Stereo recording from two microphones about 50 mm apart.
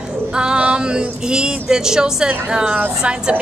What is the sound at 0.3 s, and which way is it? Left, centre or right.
Speech, centre.